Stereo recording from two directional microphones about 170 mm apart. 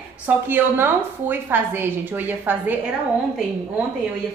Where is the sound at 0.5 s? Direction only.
10° right (ahead or behind).